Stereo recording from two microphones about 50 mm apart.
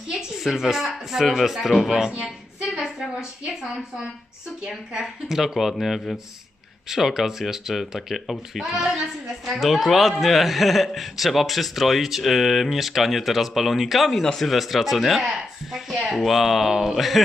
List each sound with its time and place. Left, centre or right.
0.1 s speech: centre
2.2 s a sound: centre
2.8 s a woman's voice: centre